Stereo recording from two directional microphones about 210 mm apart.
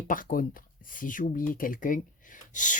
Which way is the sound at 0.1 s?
40° left (ahead or behind).